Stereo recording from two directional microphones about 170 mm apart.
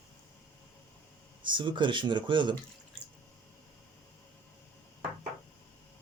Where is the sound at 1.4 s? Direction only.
30° right (ahead or behind).